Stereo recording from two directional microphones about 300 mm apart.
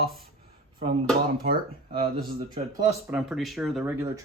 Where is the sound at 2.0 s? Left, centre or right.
Right.